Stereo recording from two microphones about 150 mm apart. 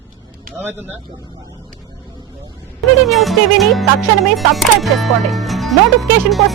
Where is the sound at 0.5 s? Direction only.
10° right (ahead or behind).